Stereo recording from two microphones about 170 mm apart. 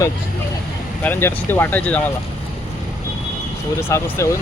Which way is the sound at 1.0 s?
10° left (ahead or behind).